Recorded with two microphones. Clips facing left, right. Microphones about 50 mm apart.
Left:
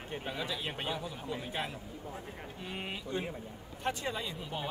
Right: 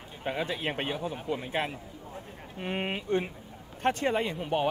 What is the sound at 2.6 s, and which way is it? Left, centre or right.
Speech, right.